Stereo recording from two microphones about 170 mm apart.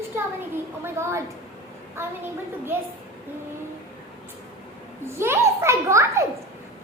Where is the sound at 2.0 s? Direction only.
15° right (ahead or behind).